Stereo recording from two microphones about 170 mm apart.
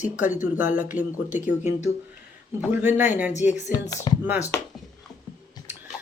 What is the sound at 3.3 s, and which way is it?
Speech, 45° left (ahead or behind).